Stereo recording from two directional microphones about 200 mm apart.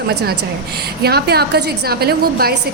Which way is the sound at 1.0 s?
50° right (ahead or behind).